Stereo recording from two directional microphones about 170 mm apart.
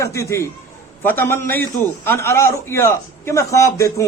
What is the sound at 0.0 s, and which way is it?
A man's voice, 15° left (ahead or behind).